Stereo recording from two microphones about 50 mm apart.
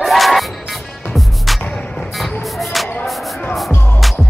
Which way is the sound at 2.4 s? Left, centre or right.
Centre.